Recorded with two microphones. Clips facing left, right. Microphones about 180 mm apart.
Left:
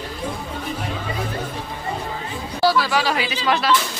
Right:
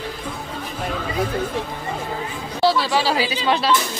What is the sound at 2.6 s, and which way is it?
Speech, 25° right (ahead or behind).